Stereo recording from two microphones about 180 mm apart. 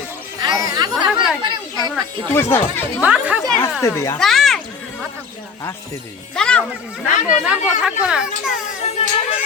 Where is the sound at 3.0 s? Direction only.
5° right (ahead or behind).